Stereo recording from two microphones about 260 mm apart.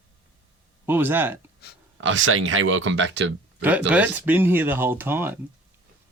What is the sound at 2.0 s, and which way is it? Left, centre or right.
Speech, right.